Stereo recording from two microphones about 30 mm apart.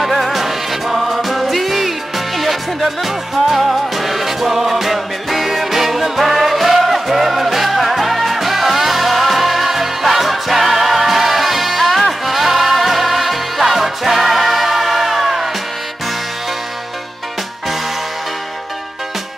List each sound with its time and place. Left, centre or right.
0.0 s music: centre